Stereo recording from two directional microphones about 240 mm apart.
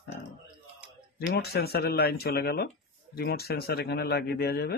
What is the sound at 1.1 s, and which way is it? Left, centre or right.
Speech, left.